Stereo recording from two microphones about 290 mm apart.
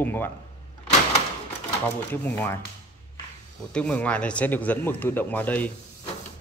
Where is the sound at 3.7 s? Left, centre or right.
Centre.